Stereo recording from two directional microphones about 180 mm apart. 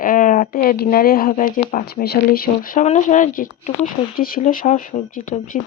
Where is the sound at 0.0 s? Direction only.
50° left (ahead or behind).